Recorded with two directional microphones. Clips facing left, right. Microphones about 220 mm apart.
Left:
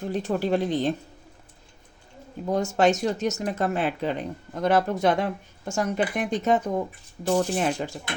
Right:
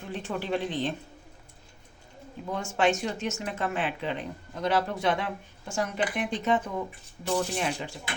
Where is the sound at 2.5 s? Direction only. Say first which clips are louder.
Left 5 dB; 40° left (ahead or behind).